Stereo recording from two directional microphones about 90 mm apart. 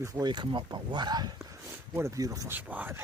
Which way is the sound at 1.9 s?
30° right (ahead or behind).